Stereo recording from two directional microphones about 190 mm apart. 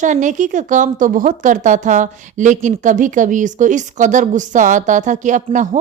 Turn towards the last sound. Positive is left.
turn(degrees=-40)  # may be behind; listen again after turning